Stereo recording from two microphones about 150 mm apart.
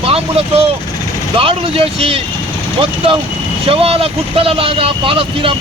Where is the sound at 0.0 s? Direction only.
40° right (ahead or behind).